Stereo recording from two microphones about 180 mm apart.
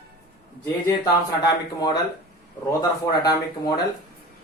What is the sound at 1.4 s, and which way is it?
Speech, 20° left (ahead or behind).